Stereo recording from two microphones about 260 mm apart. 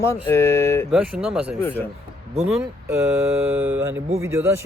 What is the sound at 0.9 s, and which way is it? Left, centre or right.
Speech, centre.